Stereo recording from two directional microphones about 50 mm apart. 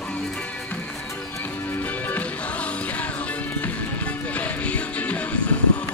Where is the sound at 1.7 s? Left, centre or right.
Left.